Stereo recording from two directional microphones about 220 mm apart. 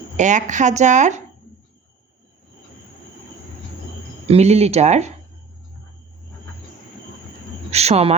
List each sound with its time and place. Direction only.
0.2 s a woman's voice: 35° right (ahead or behind)
4.3 s speech: 30° right (ahead or behind)
7.7 s speech: 30° right (ahead or behind)